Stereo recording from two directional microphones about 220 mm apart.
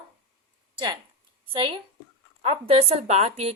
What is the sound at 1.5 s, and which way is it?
A woman's voice, 25° right (ahead or behind).